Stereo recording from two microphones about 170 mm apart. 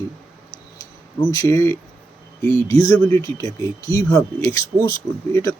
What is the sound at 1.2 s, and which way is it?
Speech, 20° left (ahead or behind).